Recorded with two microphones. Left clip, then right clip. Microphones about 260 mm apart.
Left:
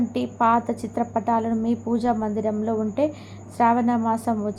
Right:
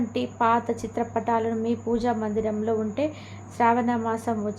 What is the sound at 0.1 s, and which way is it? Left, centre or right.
A woman's voice, centre.